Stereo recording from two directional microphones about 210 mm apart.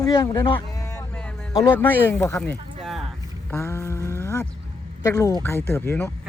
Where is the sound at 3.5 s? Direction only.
10° left (ahead or behind).